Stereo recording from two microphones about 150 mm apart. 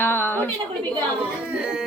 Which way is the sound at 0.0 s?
15° left (ahead or behind).